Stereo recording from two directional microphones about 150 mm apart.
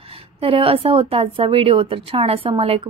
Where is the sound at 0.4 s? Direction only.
40° right (ahead or behind).